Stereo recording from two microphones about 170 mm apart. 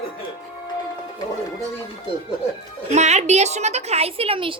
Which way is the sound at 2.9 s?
40° right (ahead or behind).